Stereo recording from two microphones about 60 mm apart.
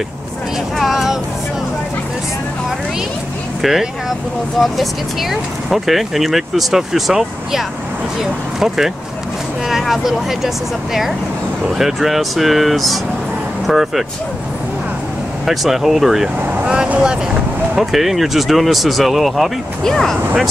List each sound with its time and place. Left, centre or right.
0.7 s vehicle: centre
4.6 s speech: centre
15.4 s speech: centre
16.3 s vehicle: right
16.6 s vehicle: centre
16.9 s speech: centre
17.7 s speech: centre